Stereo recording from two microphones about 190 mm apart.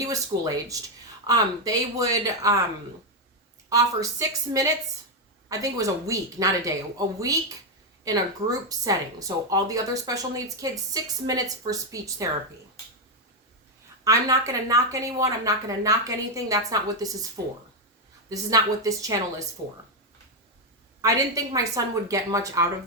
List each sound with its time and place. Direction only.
0.0 s speech: 15° right (ahead or behind)
3.7 s speech: 15° right (ahead or behind)
8.0 s speech: 20° right (ahead or behind)
14.0 s speech: 15° right (ahead or behind)
21.0 s speech: 15° right (ahead or behind)